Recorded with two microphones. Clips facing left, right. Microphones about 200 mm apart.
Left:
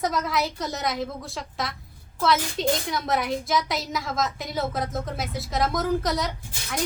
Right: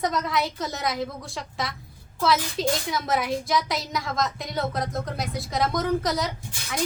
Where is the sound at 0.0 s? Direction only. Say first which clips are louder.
Even; centre (ahead or behind).